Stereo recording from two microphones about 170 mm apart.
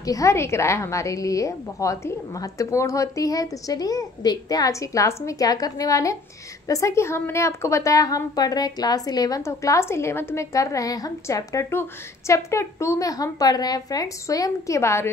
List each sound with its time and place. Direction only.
0.0 s a woman's voice: 20° left (ahead or behind)